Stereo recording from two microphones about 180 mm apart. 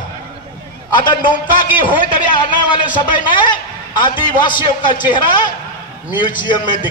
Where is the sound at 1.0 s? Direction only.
25° left (ahead or behind).